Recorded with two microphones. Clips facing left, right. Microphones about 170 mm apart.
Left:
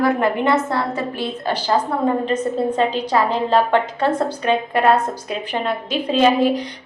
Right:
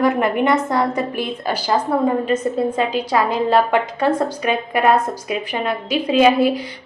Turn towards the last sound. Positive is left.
turn(degrees=-10)  # may be behind; listen again after turning